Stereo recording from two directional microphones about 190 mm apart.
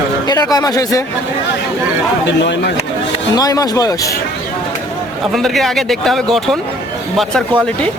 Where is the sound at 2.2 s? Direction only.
65° left (ahead or behind).